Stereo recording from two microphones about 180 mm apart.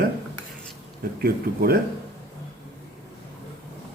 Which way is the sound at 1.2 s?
55° right (ahead or behind).